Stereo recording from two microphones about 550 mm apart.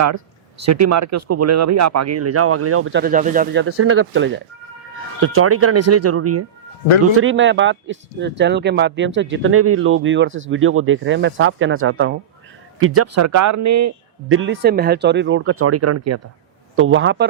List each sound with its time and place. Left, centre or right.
0.6 s speech: right